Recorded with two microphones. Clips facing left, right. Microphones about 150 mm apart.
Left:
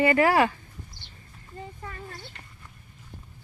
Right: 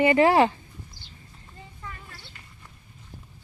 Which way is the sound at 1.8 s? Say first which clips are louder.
Left 3 dB; 45° left (ahead or behind).